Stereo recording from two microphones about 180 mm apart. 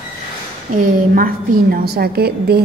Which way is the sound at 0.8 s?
50° right (ahead or behind).